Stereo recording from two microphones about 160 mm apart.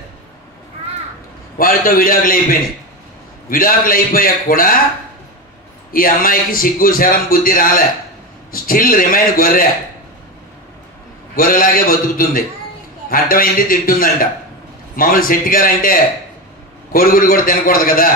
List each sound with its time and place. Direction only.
1.6 s a man's voice: 60° left (ahead or behind)
3.4 s a man's voice: 60° left (ahead or behind)
5.9 s a man's voice: 60° left (ahead or behind)
11.3 s a man's voice: 60° left (ahead or behind)